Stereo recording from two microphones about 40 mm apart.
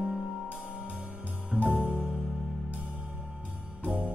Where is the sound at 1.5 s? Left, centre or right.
Right.